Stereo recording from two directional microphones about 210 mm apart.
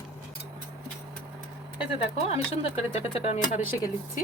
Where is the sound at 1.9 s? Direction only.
30° left (ahead or behind).